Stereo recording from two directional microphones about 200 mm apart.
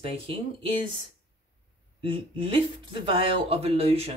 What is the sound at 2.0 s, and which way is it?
Speech, 25° right (ahead or behind).